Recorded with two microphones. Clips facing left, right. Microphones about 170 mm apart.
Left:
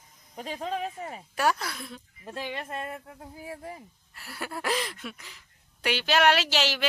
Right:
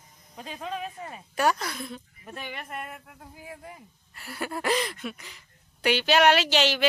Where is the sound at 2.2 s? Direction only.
25° left (ahead or behind).